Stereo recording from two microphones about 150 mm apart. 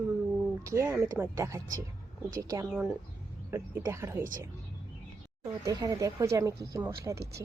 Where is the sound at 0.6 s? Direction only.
20° right (ahead or behind).